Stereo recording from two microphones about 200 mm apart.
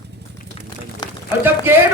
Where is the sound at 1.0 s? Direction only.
20° left (ahead or behind).